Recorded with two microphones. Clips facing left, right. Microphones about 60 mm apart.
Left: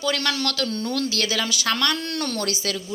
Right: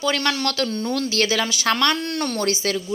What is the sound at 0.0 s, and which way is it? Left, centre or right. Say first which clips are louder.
A woman's voice: right 2 dB; right.